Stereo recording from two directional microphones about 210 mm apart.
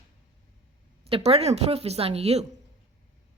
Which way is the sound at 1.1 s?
25° right (ahead or behind).